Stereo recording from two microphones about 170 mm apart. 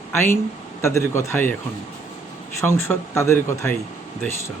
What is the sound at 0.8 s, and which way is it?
Speech, 15° left (ahead or behind).